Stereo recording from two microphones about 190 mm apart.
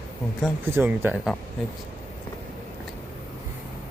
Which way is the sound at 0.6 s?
10° right (ahead or behind).